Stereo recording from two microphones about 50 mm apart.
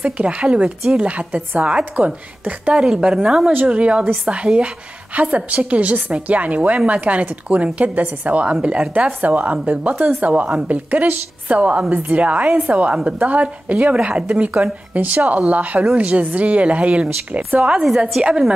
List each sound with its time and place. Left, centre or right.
0.0 s a woman's voice: right
3.1 s a woman's voice: centre
3.6 s a woman's voice: right